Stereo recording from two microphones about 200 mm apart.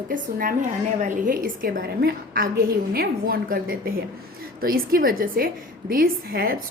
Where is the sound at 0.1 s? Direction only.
45° right (ahead or behind).